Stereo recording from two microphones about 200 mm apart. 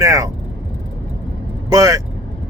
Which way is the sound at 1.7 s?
15° right (ahead or behind).